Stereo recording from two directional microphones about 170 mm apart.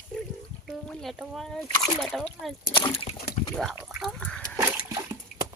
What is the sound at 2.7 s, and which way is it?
Speech, 35° left (ahead or behind).